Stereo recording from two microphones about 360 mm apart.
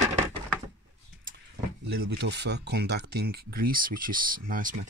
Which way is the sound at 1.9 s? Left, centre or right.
Right.